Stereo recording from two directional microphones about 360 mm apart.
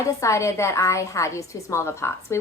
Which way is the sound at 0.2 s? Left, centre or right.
Centre.